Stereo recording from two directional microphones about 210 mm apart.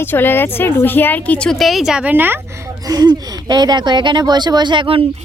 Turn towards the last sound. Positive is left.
turn(degrees=-25)  # may be behind; listen again after turning